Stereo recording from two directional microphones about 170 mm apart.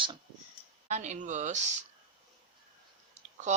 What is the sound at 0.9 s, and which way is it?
Speech, 45° right (ahead or behind).